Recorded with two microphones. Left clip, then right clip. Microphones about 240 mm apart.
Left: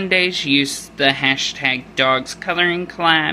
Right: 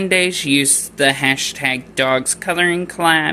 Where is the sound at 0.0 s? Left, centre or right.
Centre.